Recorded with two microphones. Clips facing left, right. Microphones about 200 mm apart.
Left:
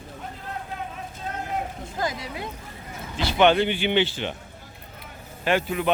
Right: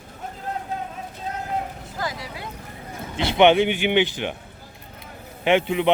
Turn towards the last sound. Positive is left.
turn(degrees=-20)  # may be behind; listen again after turning